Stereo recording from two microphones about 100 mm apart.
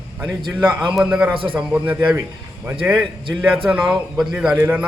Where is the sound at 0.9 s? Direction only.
10° right (ahead or behind).